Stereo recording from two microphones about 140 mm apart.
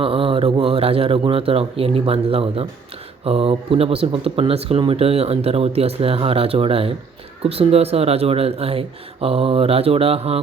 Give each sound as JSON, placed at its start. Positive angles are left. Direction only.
{"t": 0.0, "sound": "a man's voice", "side_deg": -40}